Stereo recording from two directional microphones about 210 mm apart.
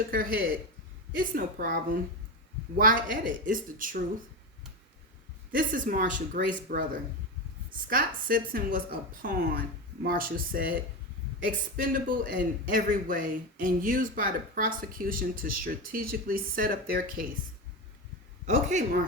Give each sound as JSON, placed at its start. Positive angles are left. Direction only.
{"t": 0.1, "sound": "a woman's voice", "side_deg": -45}
{"t": 2.7, "sound": "a man's voice", "side_deg": -40}
{"t": 5.5, "sound": "a man's voice", "side_deg": -40}
{"t": 7.9, "sound": "a woman's voice", "side_deg": -45}
{"t": 11.8, "sound": "a man's voice", "side_deg": -40}
{"t": 18.4, "sound": "a man's voice", "side_deg": -35}